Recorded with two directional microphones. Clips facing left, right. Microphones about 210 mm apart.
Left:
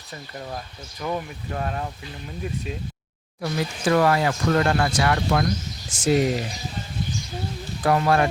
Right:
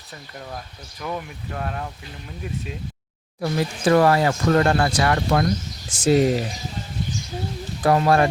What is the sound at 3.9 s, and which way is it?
Speech, 40° right (ahead or behind).